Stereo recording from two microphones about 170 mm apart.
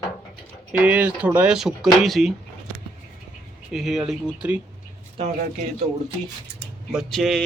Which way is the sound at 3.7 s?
Centre (ahead or behind).